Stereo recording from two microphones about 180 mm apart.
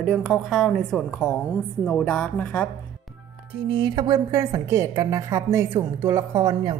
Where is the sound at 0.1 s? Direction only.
Centre (ahead or behind).